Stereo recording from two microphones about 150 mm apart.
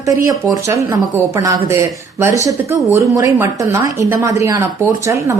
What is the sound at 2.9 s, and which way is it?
A woman's voice, 20° right (ahead or behind).